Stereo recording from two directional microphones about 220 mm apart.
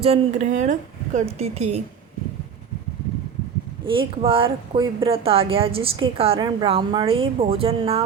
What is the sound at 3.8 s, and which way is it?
Speech, 25° right (ahead or behind).